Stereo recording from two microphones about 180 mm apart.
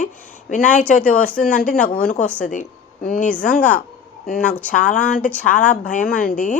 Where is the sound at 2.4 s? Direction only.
45° left (ahead or behind).